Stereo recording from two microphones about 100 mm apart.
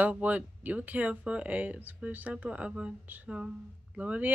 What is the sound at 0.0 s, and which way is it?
Speech, 15° right (ahead or behind).